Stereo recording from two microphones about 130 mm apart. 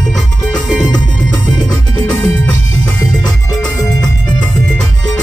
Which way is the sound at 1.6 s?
30° left (ahead or behind).